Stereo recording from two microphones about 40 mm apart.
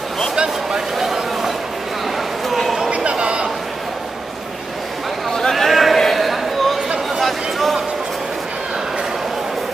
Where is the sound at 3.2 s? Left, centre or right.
Right.